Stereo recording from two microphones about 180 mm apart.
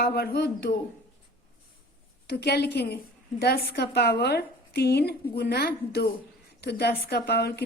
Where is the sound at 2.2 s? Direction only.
60° left (ahead or behind).